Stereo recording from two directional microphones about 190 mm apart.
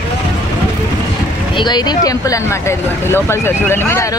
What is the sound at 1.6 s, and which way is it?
Speech, 20° left (ahead or behind).